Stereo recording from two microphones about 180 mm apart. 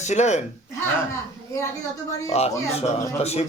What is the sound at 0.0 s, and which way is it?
Speech, 40° left (ahead or behind).